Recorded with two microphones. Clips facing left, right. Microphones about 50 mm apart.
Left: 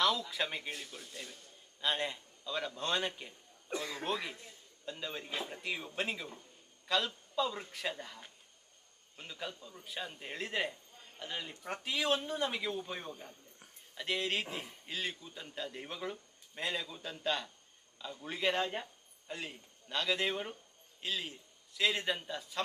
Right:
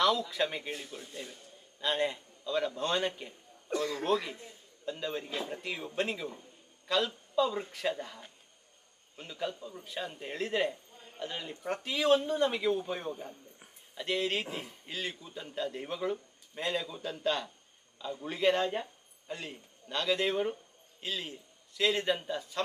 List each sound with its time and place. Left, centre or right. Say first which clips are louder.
0.0 s a man's voice: right 4 dB; centre
0.7 s speech: right 3 dB; centre
1.8 s a man's voice: right 4 dB; centre
3.7 s a man's voice: right 7 dB; centre
10.7 s a sound: right 6 dB; centre
11.6 s a man's voice: right 6 dB; centre
13.1 s speech: right 7 dB; centre
13.9 s a man's voice: right 3 dB; centre